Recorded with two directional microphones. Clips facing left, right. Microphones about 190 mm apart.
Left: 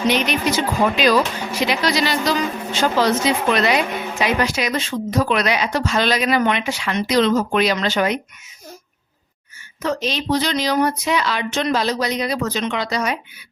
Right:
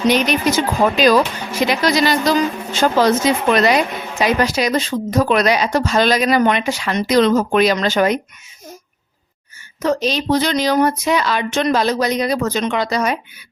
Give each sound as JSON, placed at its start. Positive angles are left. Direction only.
{"t": 0.1, "sound": "speech", "side_deg": -40}
{"t": 9.8, "sound": "speech", "side_deg": -40}